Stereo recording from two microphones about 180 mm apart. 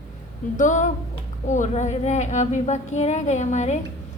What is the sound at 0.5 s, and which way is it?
A woman's voice, 45° left (ahead or behind).